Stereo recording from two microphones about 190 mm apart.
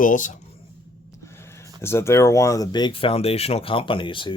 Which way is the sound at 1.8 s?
15° left (ahead or behind).